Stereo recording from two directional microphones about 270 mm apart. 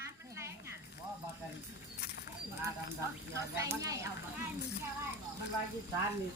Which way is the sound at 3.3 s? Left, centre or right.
Centre.